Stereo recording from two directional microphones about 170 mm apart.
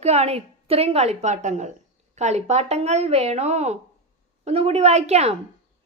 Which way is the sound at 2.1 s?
40° right (ahead or behind).